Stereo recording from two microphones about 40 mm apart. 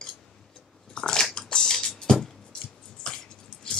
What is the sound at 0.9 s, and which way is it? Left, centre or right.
Biting, centre.